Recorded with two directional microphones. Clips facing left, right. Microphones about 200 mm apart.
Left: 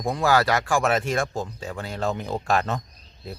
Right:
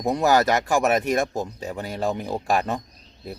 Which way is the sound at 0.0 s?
20° right (ahead or behind).